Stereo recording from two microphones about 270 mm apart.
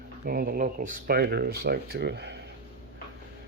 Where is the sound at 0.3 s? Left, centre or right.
Right.